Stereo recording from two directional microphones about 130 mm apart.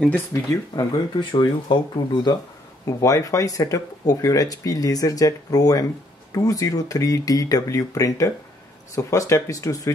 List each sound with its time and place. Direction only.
0.3 s speech: 25° left (ahead or behind)
2.8 s speech: 25° left (ahead or behind)